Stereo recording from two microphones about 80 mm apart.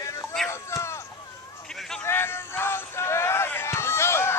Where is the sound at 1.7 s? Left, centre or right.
Centre.